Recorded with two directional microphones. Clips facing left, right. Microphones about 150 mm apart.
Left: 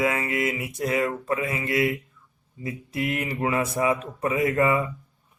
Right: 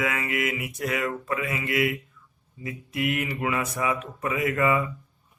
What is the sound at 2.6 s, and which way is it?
Speech, 30° left (ahead or behind).